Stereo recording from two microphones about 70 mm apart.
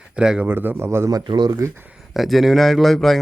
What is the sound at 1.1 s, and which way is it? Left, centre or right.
Speech, right.